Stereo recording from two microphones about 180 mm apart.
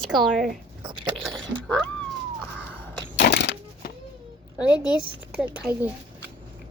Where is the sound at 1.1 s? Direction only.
Centre (ahead or behind).